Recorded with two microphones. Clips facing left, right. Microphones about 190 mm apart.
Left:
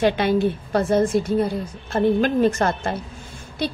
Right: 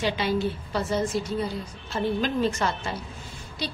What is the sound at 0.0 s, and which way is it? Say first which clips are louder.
A woman's voice: left 7 dB; 55° left (ahead or behind).